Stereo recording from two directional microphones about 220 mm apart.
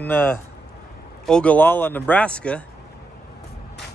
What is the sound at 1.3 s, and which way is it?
Speech, 5° left (ahead or behind).